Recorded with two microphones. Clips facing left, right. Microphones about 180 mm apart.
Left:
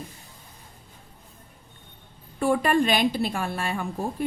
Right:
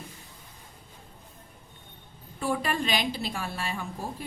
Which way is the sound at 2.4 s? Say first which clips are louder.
Left 7 dB; 55° left (ahead or behind).